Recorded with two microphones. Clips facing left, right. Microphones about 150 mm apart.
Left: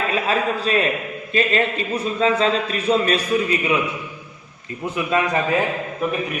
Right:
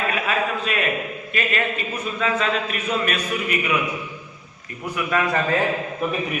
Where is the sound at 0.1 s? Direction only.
30° left (ahead or behind).